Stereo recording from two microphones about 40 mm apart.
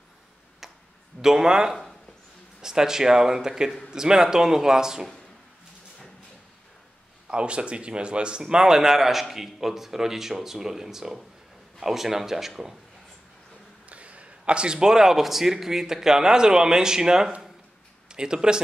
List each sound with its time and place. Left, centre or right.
1.2 s a man's voice: centre
7.2 s a man's voice: right; by 12.7 s centre
13.8 s a man's voice: right